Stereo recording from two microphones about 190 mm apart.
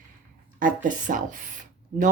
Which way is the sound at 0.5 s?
45° right (ahead or behind).